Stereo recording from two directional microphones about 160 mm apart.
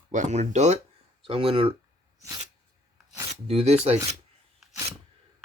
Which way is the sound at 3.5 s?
40° right (ahead or behind).